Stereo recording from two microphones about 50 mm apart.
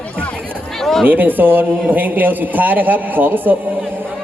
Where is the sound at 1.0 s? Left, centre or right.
Right.